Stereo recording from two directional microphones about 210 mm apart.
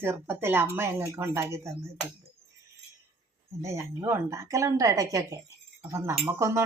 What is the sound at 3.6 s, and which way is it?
A woman's voice, 15° right (ahead or behind).